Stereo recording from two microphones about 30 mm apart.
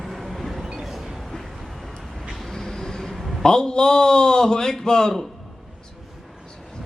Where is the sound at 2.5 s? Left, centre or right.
Centre.